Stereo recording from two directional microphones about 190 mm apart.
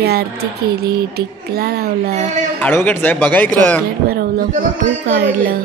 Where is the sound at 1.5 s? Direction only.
55° right (ahead or behind).